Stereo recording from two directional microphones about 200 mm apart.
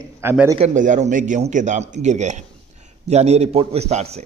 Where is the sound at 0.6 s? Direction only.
40° right (ahead or behind).